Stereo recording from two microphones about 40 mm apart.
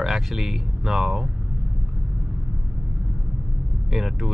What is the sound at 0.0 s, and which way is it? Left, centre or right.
Speech, centre.